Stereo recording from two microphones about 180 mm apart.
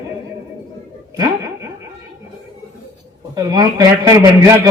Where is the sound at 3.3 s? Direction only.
20° right (ahead or behind).